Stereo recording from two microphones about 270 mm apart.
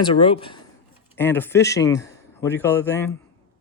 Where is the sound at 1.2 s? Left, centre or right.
Centre.